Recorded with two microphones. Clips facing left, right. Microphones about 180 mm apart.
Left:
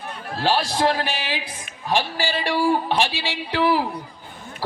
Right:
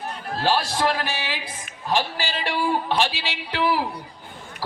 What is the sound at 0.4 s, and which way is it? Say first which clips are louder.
A man's voice: left 2 dB; 15° left (ahead or behind).